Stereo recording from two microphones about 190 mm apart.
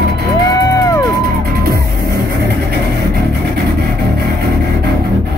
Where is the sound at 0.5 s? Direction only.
20° left (ahead or behind).